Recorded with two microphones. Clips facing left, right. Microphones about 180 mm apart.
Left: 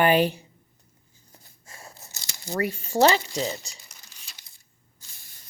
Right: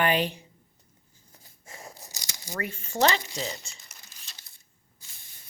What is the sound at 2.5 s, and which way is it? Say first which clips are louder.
Speech: left 6 dB; 40° left (ahead or behind).